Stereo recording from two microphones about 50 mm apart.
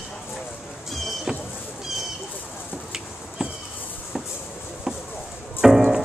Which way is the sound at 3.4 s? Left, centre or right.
Centre.